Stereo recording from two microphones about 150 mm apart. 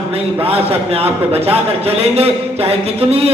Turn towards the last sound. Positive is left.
turn(degrees=-40)  # may be behind; listen again after turning